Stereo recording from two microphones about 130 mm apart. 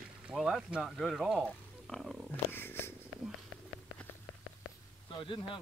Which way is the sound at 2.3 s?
15° left (ahead or behind).